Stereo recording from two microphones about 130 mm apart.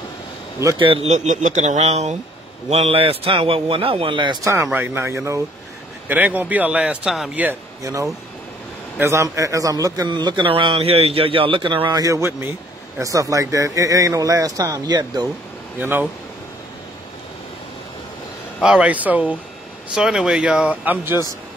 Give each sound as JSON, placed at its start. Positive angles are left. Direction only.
{"t": 0.7, "sound": "a man's voice", "side_deg": -45}
{"t": 1.0, "sound": "a man's voice", "side_deg": -65}
{"t": 4.7, "sound": "a man's voice", "side_deg": -15}
{"t": 7.8, "sound": "a man's voice", "side_deg": -25}
{"t": 12.0, "sound": "a man's voice", "side_deg": -20}
{"t": 15.8, "sound": "speech", "side_deg": -15}
{"t": 18.6, "sound": "speech", "side_deg": -5}